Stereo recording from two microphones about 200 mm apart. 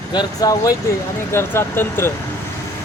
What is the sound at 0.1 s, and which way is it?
Speech, 20° left (ahead or behind).